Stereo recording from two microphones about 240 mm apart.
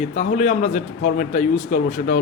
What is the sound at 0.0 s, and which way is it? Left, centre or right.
A man's voice, left.